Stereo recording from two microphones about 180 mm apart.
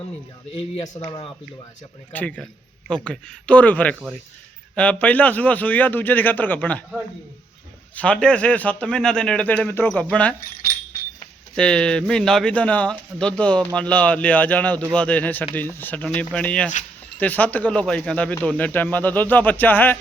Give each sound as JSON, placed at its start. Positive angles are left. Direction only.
{"t": 0.5, "sound": "speech", "side_deg": 25}
{"t": 2.1, "sound": "speech", "side_deg": 5}
{"t": 7.9, "sound": "speech", "side_deg": 5}
{"t": 11.5, "sound": "speech", "side_deg": 5}